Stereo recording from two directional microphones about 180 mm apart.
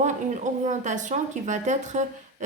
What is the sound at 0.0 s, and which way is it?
A woman's voice, 40° right (ahead or behind).